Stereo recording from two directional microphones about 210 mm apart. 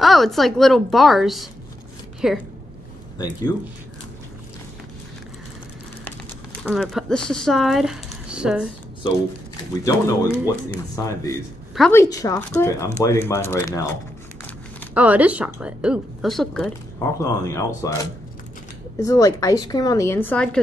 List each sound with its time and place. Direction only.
0.0 s speech: centre (ahead or behind)
6.6 s speech: centre (ahead or behind)
9.8 s a woman's voice: 15° left (ahead or behind)
15.0 s speech: 5° right (ahead or behind)
17.0 s a woman's voice: 15° left (ahead or behind)